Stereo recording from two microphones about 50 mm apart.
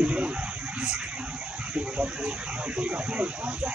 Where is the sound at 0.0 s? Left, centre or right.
Right.